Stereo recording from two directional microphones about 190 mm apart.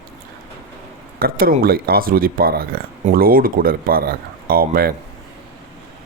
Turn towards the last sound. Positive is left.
turn(degrees=-50)  # may be behind; listen again after turning